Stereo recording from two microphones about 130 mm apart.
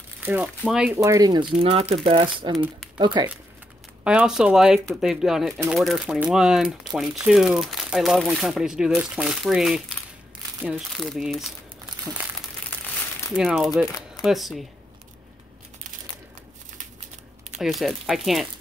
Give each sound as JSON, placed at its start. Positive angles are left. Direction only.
{"t": 0.2, "sound": "speech", "side_deg": -15}
{"t": 0.9, "sound": "speech", "side_deg": -25}
{"t": 1.6, "sound": "speech", "side_deg": -45}
{"t": 4.0, "sound": "speech", "side_deg": -10}
{"t": 12.1, "sound": "crumpling", "side_deg": -10}
{"t": 13.4, "sound": "speech", "side_deg": -5}
{"t": 17.6, "sound": "speech", "side_deg": 0}